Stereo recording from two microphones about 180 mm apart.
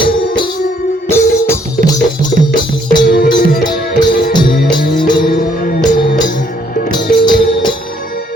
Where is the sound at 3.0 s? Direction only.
60° left (ahead or behind).